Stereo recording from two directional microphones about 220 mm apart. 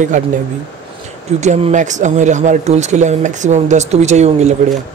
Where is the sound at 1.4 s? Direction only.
30° right (ahead or behind).